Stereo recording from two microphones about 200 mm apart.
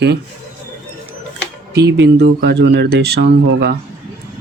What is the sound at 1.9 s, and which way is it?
Speech, 60° right (ahead or behind).